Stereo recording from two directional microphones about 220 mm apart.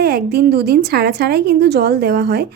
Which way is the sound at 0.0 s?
45° right (ahead or behind).